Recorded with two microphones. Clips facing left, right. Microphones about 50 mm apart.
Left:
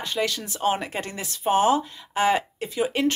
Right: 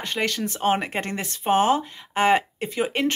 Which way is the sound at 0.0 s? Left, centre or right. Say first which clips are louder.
Right 1 dB; right.